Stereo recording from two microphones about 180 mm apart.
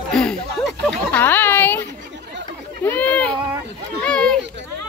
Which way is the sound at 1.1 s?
10° left (ahead or behind).